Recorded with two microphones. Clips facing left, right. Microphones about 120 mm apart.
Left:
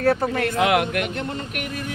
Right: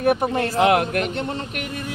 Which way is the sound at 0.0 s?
20° right (ahead or behind).